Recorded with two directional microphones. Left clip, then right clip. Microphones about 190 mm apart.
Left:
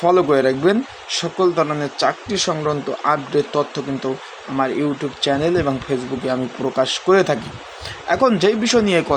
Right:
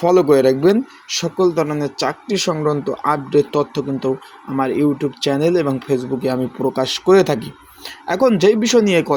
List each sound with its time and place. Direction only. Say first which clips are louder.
0.0 s speech: right 2 dB; 40° right (ahead or behind)